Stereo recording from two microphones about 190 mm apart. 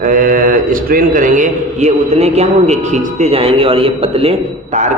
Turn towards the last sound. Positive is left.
turn(degrees=-30)  # may be behind; listen again after turning